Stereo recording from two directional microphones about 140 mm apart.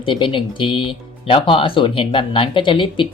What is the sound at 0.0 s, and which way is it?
Speech, 35° left (ahead or behind).